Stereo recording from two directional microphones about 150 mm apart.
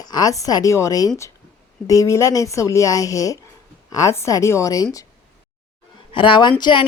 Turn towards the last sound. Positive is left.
turn(degrees=30)  # may be behind; listen again after turning